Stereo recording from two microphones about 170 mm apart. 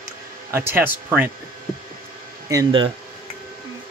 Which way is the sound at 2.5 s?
25° right (ahead or behind).